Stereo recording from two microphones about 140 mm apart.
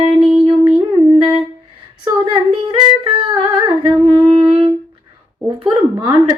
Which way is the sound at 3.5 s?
30° right (ahead or behind).